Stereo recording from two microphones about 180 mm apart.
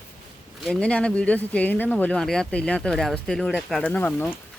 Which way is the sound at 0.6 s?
5° left (ahead or behind).